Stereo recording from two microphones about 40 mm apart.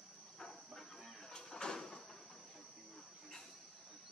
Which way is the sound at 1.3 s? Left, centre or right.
Centre.